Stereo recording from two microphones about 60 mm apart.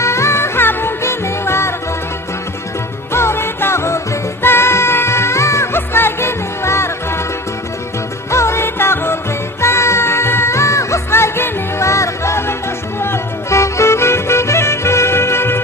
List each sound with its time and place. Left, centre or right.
0.0 s music: left
3.1 s music: left
8.3 s music: left